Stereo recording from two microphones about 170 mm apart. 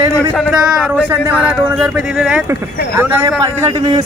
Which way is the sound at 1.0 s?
10° right (ahead or behind).